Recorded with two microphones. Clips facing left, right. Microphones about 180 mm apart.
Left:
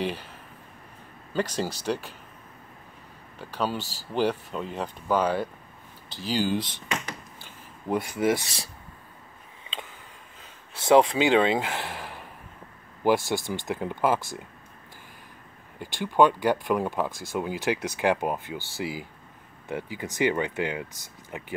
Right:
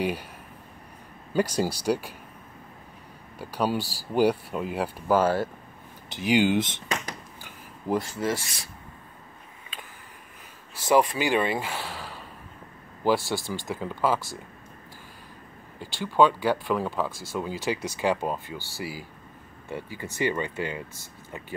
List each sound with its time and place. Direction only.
0.0 s speech: 10° right (ahead or behind)
1.3 s speech: 10° right (ahead or behind)
3.3 s speech: 10° right (ahead or behind)
6.0 s speech: 20° right (ahead or behind)
8.0 s speech: 15° left (ahead or behind)
10.9 s speech: 20° left (ahead or behind)
15.8 s speech: 15° left (ahead or behind)